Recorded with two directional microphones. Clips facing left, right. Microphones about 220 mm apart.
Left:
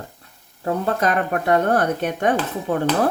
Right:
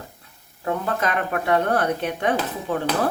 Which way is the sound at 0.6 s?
35° left (ahead or behind).